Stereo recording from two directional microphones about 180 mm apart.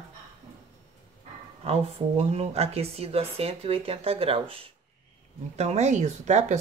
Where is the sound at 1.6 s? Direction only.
35° right (ahead or behind).